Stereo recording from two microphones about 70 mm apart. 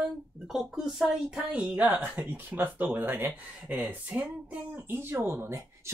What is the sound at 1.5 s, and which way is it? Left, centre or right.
Speech, centre.